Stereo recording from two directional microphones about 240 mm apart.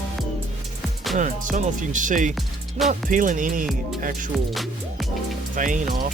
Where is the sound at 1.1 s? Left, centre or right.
Right.